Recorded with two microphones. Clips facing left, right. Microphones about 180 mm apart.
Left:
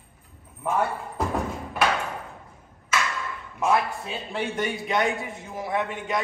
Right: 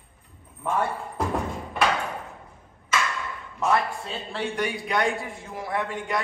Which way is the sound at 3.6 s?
10° left (ahead or behind).